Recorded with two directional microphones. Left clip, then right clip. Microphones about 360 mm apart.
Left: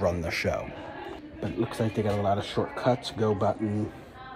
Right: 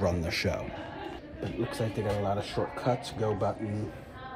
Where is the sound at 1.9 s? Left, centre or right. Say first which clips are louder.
Left 5 dB; left.